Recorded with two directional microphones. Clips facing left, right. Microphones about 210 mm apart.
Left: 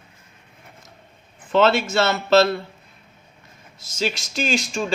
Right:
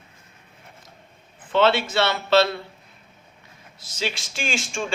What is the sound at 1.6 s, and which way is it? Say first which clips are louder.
Speech: left 2 dB; 45° left (ahead or behind).